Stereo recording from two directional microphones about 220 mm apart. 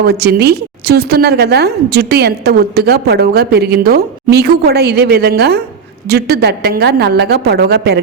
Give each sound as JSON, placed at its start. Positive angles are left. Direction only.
{"t": 0.0, "sound": "a woman's voice", "side_deg": -45}